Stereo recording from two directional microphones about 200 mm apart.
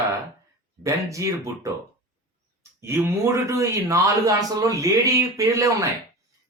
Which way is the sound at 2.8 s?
15° right (ahead or behind).